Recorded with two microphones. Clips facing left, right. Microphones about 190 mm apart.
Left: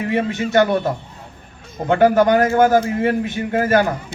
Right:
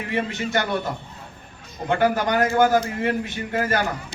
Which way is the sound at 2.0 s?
50° left (ahead or behind).